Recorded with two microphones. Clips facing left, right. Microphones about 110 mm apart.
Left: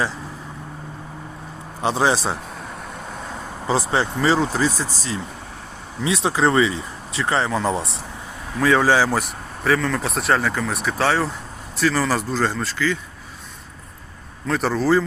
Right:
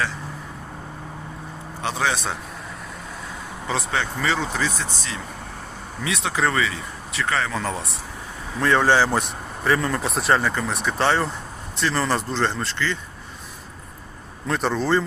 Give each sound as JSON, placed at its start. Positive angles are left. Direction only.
{"t": 1.8, "sound": "speech", "side_deg": 30}
{"t": 3.7, "sound": "speech", "side_deg": 30}
{"t": 8.5, "sound": "speech", "side_deg": 5}
{"t": 14.4, "sound": "speech", "side_deg": 0}